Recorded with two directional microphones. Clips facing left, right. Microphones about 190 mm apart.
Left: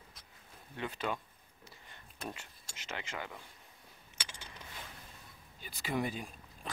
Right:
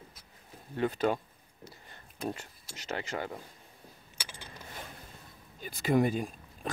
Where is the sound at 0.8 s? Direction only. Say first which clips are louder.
Right 9 dB; 40° right (ahead or behind).